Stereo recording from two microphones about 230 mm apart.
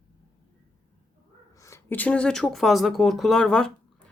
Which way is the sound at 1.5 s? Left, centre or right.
Centre.